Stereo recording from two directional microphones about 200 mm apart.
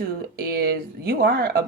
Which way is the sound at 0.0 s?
50° right (ahead or behind).